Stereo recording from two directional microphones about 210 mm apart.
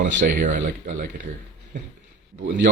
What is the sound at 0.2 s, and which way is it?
Speech, 40° right (ahead or behind).